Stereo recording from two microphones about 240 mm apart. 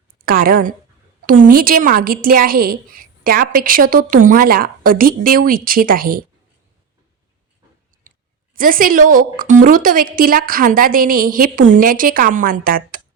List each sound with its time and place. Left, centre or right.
0.3 s a woman's voice: right
8.5 s a woman's voice: right